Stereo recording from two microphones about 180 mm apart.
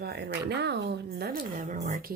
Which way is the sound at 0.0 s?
65° right (ahead or behind).